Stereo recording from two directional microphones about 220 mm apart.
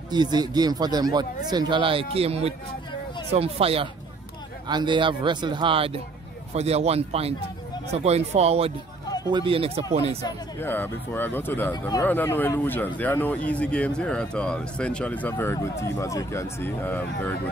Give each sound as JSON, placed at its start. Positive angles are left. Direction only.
{"t": 0.1, "sound": "speech", "side_deg": -20}
{"t": 10.2, "sound": "speech", "side_deg": 10}